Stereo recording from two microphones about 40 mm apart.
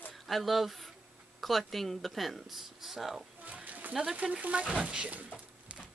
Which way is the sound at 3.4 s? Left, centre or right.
Right.